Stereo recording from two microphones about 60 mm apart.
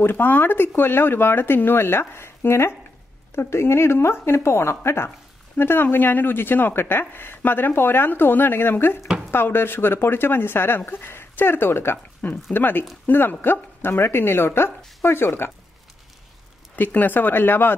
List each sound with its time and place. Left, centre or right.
0.0 s speech: left
12.2 s speech: left
16.7 s speech: left